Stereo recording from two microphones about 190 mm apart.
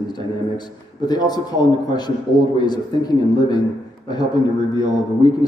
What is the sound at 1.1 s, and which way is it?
Speech, 20° left (ahead or behind).